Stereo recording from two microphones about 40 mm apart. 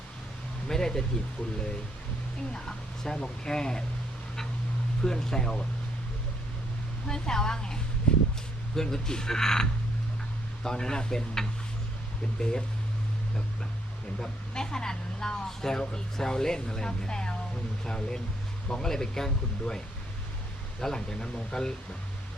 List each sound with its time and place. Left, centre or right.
0.7 s speech: centre
2.5 s speech: centre
5.0 s speech: centre
7.1 s speech: centre
8.7 s speech: centre
14.2 s speech: centre
20.8 s speech: centre